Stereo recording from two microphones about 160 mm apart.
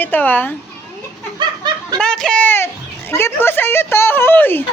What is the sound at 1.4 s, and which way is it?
Snicker, 25° right (ahead or behind).